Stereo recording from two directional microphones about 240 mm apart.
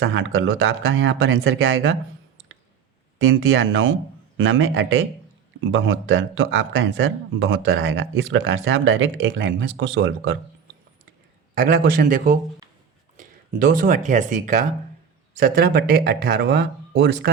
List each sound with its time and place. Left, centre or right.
0.0 s speech: right
3.2 s speech: right
11.5 s speech: right